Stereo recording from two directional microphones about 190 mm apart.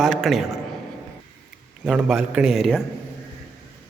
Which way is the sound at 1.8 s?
Centre (ahead or behind).